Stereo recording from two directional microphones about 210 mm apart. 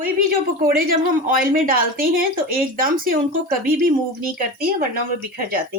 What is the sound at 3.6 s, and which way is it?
Speech, 45° right (ahead or behind).